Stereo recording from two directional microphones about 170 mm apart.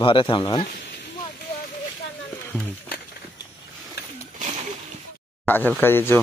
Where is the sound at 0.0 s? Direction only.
30° left (ahead or behind).